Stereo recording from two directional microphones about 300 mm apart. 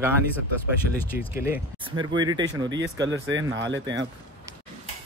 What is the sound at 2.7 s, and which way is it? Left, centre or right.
Speech, right.